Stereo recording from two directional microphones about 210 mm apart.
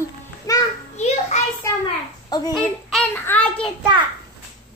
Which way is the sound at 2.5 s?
5° left (ahead or behind).